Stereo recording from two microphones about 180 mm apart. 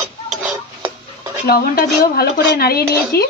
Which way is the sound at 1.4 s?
55° left (ahead or behind).